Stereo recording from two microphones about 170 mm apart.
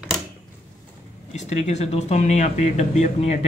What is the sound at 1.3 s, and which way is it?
Speech, 45° left (ahead or behind).